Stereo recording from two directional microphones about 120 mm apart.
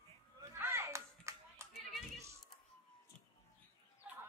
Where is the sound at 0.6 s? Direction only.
20° right (ahead or behind).